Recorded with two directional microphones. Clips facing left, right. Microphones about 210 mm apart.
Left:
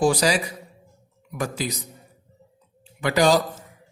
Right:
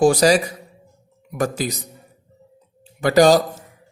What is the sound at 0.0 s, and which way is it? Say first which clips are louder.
A woman's voice: right 6 dB; 45° right (ahead or behind).